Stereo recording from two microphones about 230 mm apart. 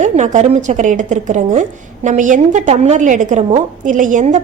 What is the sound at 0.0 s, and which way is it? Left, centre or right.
A woman's voice, right.